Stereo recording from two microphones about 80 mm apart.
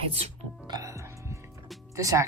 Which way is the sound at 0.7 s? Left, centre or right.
Right.